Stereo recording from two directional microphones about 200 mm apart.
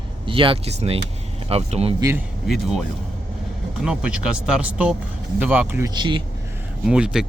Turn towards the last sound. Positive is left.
turn(degrees=-5)  # may be behind; listen again after turning